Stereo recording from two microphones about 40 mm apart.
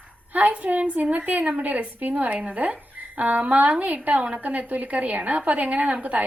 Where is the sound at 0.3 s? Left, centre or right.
Right.